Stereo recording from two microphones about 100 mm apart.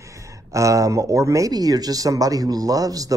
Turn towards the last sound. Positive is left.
turn(degrees=-40)  # may be behind; listen again after turning